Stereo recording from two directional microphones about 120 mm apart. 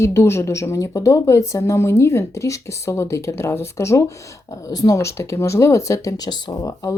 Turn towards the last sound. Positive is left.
turn(degrees=30)  # may be behind; listen again after turning